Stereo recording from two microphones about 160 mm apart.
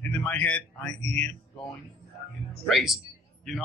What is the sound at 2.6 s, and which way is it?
Speech, centre (ahead or behind).